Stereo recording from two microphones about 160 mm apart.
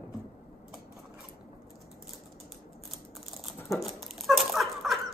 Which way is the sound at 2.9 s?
Centre (ahead or behind).